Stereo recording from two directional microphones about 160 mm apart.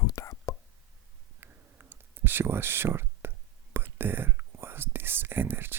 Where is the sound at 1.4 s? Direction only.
15° right (ahead or behind).